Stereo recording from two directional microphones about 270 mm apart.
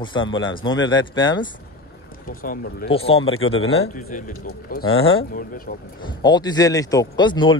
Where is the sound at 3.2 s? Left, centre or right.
Left.